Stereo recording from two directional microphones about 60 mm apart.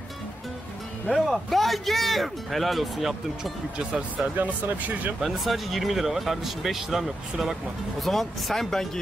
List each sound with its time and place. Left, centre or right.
1.0 s speech: centre
3.7 s speech: centre
4.4 s speech: right
5.2 s speech: centre